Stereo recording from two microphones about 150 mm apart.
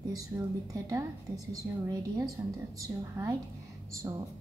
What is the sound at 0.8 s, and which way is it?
A woman's voice, 20° right (ahead or behind).